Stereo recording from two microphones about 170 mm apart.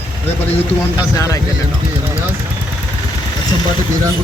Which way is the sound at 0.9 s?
20° left (ahead or behind).